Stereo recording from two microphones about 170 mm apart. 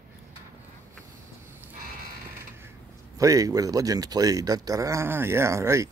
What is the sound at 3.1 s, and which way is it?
Speech, 20° right (ahead or behind).